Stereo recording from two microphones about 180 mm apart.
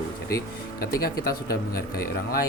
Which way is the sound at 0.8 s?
55° left (ahead or behind).